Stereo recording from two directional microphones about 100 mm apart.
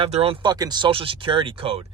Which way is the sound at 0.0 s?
70° right (ahead or behind).